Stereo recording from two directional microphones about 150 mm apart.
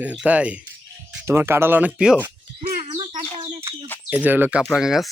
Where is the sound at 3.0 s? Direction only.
35° right (ahead or behind).